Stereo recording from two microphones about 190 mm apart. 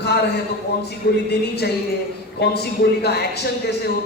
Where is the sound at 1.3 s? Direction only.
60° left (ahead or behind).